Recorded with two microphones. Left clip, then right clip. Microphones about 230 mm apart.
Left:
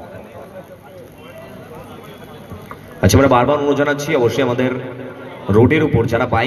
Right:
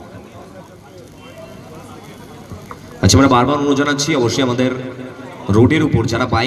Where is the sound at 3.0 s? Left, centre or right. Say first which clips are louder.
Even; right.